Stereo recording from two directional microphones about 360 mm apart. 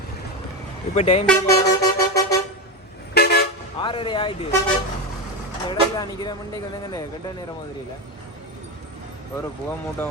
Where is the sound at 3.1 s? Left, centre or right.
Left.